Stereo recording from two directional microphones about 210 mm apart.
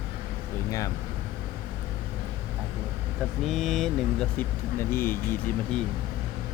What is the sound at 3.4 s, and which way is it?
Speech, centre (ahead or behind).